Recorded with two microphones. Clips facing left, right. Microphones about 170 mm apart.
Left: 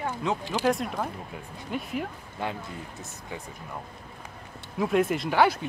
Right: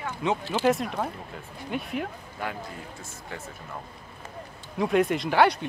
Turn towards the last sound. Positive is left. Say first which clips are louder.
# right 1 dB
turn(degrees=0)  # may be behind; listen again after turning